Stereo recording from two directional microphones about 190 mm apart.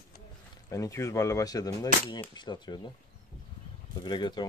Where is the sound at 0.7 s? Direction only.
15° left (ahead or behind).